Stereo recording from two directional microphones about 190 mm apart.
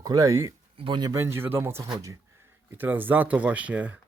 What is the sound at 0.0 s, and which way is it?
Speech, 20° right (ahead or behind).